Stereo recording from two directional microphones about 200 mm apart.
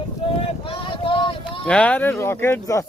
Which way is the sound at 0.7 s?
25° left (ahead or behind).